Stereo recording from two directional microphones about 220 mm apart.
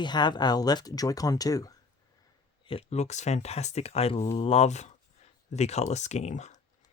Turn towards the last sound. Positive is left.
turn(degrees=30)  # may be behind; listen again after turning